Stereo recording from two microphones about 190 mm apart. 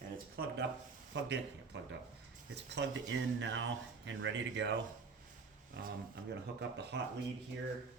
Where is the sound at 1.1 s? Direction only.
65° right (ahead or behind).